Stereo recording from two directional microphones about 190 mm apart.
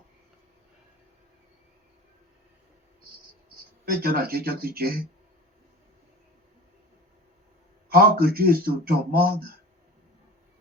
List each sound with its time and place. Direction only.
3.8 s speech: 55° right (ahead or behind)
7.9 s speech: 55° right (ahead or behind)